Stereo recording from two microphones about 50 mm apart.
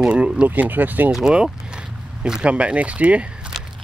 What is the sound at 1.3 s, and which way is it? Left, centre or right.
Vehicle, centre.